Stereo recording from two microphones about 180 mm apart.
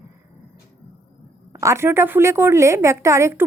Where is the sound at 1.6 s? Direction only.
15° right (ahead or behind).